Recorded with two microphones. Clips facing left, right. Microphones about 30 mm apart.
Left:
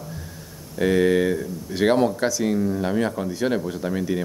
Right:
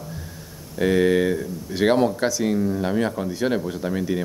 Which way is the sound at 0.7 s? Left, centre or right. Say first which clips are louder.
Even; centre.